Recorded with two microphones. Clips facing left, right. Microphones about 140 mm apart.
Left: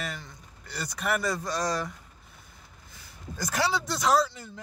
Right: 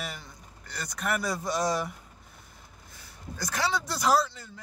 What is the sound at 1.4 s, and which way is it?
Speech, 10° right (ahead or behind).